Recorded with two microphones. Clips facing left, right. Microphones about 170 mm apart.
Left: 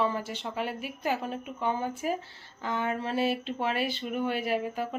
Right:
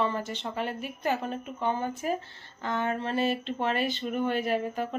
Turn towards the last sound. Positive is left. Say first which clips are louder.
# right 1 dB
turn(degrees=5)  # may be behind; listen again after turning